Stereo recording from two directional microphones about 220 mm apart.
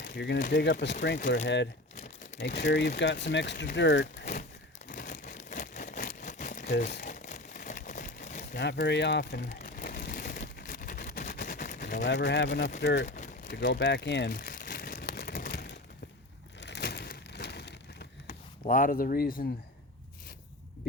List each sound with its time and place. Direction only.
0.0 s crumpling: 50° left (ahead or behind)
0.5 s speech: 50° left (ahead or behind)
2.4 s speech: 50° left (ahead or behind)
4.9 s a sound: 40° left (ahead or behind)
8.5 s speech: 50° left (ahead or behind)
9.5 s a sound: 40° left (ahead or behind)
12.0 s speech: 50° left (ahead or behind)
13.1 s crumpling: 35° left (ahead or behind)
13.5 s crumpling: 50° left (ahead or behind)
16.6 s a sound: 50° left (ahead or behind)
18.3 s speech: 35° left (ahead or behind)